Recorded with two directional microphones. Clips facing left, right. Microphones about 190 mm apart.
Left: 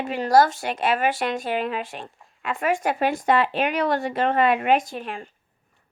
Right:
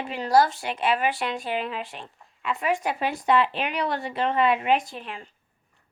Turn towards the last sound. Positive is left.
turn(degrees=45)  # may be behind; listen again after turning